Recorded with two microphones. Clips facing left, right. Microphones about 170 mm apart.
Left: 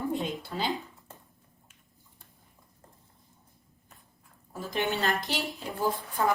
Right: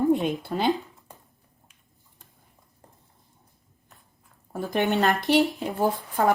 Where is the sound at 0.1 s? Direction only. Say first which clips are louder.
Right 9 dB; 60° right (ahead or behind).